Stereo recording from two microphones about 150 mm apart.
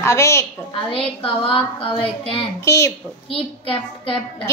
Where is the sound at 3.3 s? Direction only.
35° left (ahead or behind).